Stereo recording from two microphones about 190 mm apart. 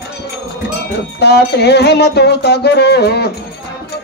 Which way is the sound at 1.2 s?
60° left (ahead or behind).